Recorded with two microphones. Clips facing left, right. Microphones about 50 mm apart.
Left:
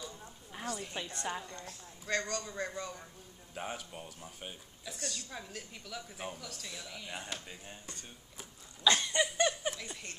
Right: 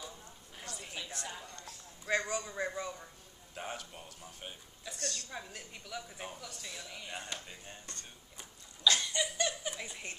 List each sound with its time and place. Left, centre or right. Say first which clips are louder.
0.7 s speech: left 5 dB; centre
1.1 s a woman's voice: left 5 dB; left
2.0 s speech: right 2 dB; centre
8.8 s a sound: left 2 dB; left
9.8 s speech: right 1 dB; centre